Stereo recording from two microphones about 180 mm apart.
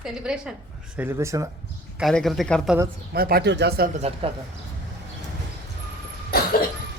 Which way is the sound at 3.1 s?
60° right (ahead or behind).